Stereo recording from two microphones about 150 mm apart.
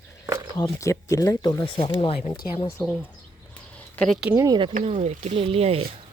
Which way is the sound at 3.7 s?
10° left (ahead or behind).